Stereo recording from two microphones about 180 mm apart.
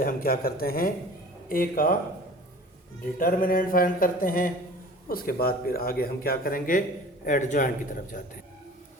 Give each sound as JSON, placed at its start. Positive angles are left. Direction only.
{"t": 0.0, "sound": "speech", "side_deg": 55}
{"t": 1.5, "sound": "music", "side_deg": 50}
{"t": 3.0, "sound": "music", "side_deg": 50}
{"t": 5.0, "sound": "speech", "side_deg": 55}
{"t": 7.3, "sound": "music", "side_deg": 45}